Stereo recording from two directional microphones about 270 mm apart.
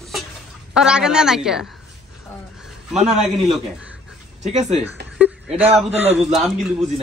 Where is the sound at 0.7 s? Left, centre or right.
Centre.